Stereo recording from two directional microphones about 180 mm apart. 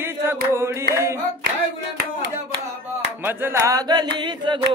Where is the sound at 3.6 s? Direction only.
20° right (ahead or behind).